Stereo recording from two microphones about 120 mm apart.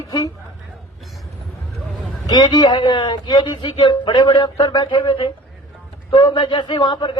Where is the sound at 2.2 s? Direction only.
35° left (ahead or behind).